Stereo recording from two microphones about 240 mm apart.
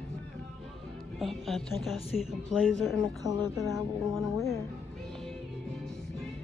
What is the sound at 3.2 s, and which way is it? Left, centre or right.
Speech, centre.